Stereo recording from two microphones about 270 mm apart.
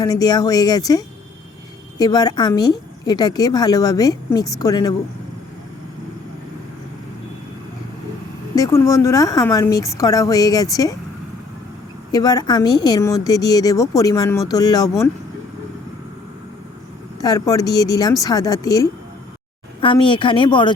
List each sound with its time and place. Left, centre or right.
0.0 s a woman's voice: centre
8.5 s a woman's voice: centre
12.1 s a woman's voice: centre
17.2 s a woman's voice: centre